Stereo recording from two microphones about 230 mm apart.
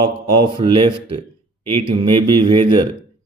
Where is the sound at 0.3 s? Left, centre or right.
Right.